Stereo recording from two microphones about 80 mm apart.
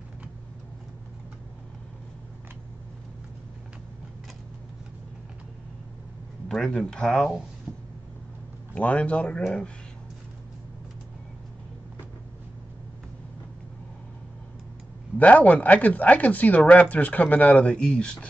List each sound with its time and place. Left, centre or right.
6.5 s speech: centre
8.7 s speech: centre
15.1 s speech: centre